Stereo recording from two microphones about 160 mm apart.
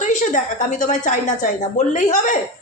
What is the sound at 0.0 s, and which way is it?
A woman's voice, 50° left (ahead or behind).